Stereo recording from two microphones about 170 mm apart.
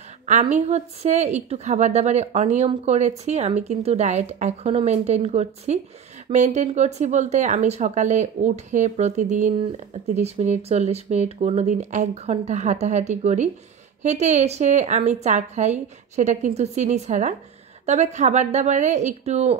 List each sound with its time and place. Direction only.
0.3 s speech: 45° right (ahead or behind)